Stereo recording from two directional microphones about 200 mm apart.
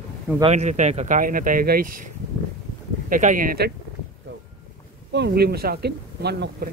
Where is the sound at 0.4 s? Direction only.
35° right (ahead or behind).